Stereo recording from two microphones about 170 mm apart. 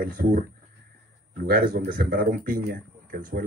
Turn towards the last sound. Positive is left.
turn(degrees=-55)  # may be behind; listen again after turning